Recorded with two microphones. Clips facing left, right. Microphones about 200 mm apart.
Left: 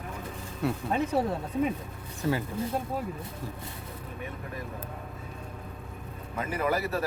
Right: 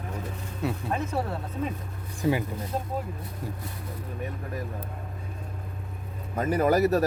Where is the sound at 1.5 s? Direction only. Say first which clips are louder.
Left 4 dB; 15° left (ahead or behind).